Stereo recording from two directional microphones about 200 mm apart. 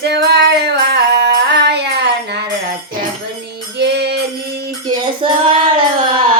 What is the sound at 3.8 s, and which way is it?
Music, 55° right (ahead or behind).